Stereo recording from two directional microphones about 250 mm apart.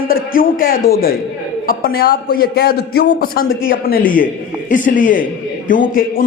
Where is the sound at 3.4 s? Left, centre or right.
Left.